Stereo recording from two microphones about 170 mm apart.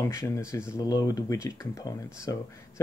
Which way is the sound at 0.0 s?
15° left (ahead or behind).